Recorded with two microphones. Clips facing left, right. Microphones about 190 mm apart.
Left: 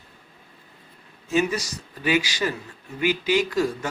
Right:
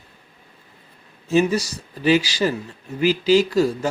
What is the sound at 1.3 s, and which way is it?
Speech, 30° right (ahead or behind).